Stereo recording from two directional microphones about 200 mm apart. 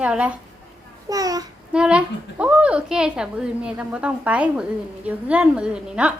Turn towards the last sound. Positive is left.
turn(degrees=-5)  # may be behind; listen again after turning